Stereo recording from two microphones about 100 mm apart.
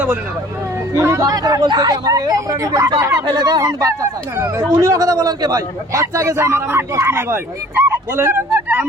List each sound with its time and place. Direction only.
0.9 s a man's voice: 30° right (ahead or behind)
3.2 s a man's voice: 45° right (ahead or behind); by 8.9 s 15° right (ahead or behind)